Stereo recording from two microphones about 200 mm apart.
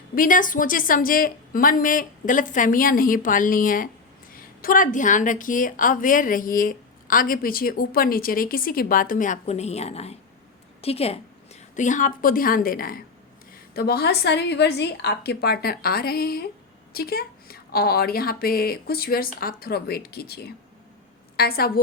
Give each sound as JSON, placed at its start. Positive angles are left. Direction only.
{"t": 0.2, "sound": "a woman's voice", "side_deg": 40}